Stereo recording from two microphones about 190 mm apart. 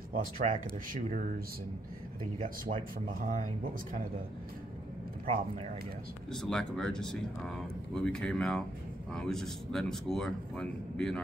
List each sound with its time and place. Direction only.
0.1 s speech: 45° right (ahead or behind)
2.4 s speech: 45° right (ahead or behind)
6.3 s speech: centre (ahead or behind)